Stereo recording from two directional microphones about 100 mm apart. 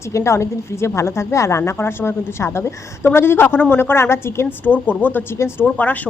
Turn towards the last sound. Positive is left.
turn(degrees=15)  # may be behind; listen again after turning